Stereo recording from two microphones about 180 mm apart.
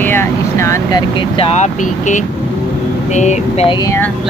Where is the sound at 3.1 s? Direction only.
40° left (ahead or behind).